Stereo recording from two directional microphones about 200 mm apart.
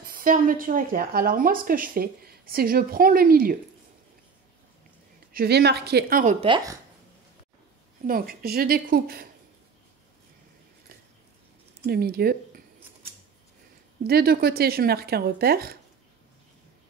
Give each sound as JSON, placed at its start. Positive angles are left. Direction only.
{"t": 0.0, "sound": "speech", "side_deg": -45}
{"t": 5.3, "sound": "speech", "side_deg": -50}
{"t": 6.4, "sound": "speech", "side_deg": -20}
{"t": 8.1, "sound": "speech", "side_deg": -50}
{"t": 11.8, "sound": "speech", "side_deg": -50}
{"t": 14.0, "sound": "speech", "side_deg": -50}